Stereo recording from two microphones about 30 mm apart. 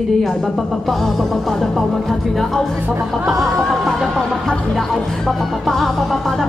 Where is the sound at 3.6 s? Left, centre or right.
Centre.